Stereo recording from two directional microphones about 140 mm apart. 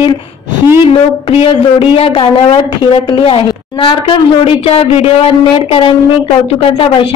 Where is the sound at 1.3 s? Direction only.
40° left (ahead or behind).